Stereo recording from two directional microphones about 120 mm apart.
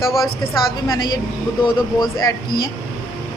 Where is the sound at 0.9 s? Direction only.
35° left (ahead or behind).